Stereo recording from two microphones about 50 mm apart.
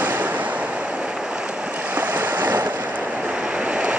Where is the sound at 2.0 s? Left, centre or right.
Right.